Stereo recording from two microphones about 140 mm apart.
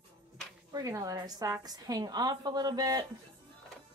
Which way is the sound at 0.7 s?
25° right (ahead or behind).